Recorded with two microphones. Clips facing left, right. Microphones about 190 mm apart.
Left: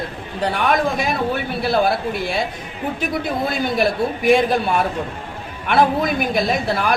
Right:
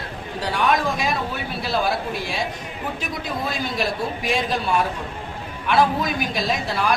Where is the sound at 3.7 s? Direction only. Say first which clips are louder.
Left 6 dB; 55° left (ahead or behind).